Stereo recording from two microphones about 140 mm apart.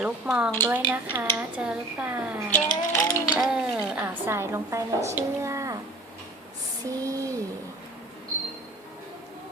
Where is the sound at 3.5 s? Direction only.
5° right (ahead or behind).